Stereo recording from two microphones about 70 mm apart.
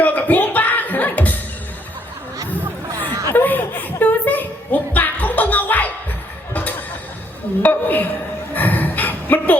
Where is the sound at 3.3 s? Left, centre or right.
Left.